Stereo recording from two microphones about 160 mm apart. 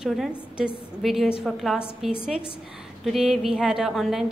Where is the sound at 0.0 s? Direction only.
Centre (ahead or behind).